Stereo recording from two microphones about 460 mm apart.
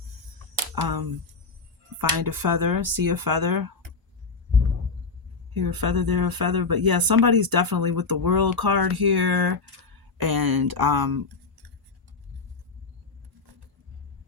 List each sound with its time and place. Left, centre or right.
0.8 s speech: right
5.5 s speech: right